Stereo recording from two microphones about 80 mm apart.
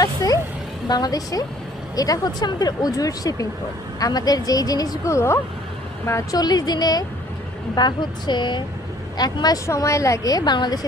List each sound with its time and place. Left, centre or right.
0.0 s vehicle: left
0.8 s a woman's voice: left
5.1 s speech: left
6.3 s a woman's voice: left
9.2 s a woman's voice: left
9.7 s speech: left